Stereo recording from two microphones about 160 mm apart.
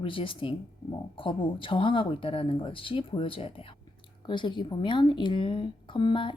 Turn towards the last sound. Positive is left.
turn(degrees=30)  # may be behind; listen again after turning